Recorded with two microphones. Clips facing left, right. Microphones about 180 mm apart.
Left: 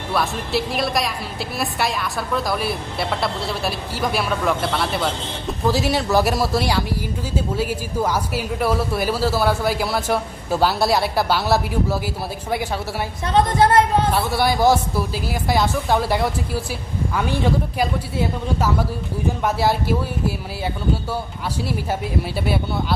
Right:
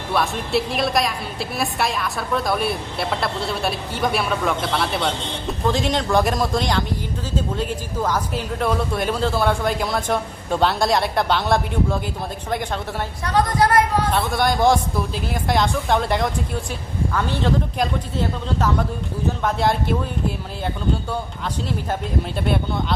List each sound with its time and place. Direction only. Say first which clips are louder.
0.1 s a woman's voice: right 1 dB; centre (ahead or behind)
13.2 s a woman's voice: left 2 dB; 25° left (ahead or behind)
14.1 s a woman's voice: left 1 dB; 5° left (ahead or behind)
22.4 s a woman's voice: right 1 dB; 5° left (ahead or behind)